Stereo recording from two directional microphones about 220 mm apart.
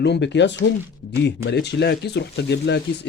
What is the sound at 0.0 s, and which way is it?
Speech, 50° left (ahead or behind).